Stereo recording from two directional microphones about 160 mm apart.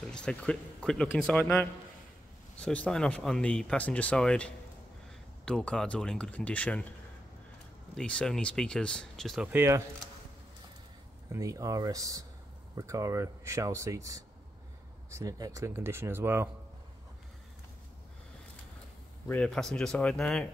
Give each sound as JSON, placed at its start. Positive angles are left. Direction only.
{"t": 0.0, "sound": "speech", "side_deg": 5}
{"t": 7.9, "sound": "speech", "side_deg": 5}
{"t": 9.5, "sound": "speech", "side_deg": -15}
{"t": 11.3, "sound": "speech", "side_deg": -20}
{"t": 19.2, "sound": "speech", "side_deg": 10}